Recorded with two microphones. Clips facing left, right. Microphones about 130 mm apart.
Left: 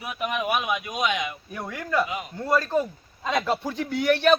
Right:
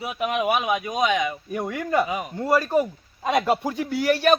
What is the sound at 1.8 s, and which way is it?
Speech, 25° right (ahead or behind).